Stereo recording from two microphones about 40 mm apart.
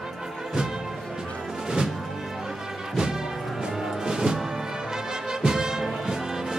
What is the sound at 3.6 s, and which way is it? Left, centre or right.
Music, centre.